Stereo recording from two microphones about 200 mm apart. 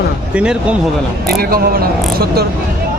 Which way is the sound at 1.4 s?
50° right (ahead or behind).